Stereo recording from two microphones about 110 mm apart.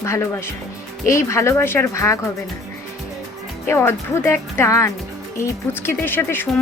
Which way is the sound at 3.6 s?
20° left (ahead or behind).